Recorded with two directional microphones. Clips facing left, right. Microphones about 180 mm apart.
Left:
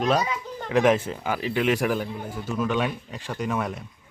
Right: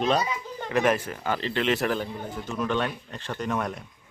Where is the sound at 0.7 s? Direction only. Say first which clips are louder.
Left 4 dB; 15° left (ahead or behind).